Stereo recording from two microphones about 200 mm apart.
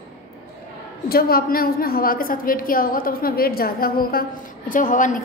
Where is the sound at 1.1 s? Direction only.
50° left (ahead or behind).